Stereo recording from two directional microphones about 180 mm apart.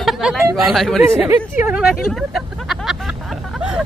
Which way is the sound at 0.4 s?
15° right (ahead or behind).